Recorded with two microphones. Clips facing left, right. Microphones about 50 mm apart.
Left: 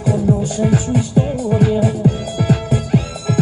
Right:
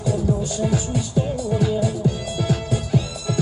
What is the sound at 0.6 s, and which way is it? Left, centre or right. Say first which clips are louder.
Music: left 6 dB; left.